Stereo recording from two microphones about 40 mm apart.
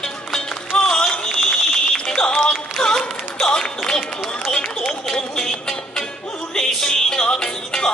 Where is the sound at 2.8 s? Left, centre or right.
Left.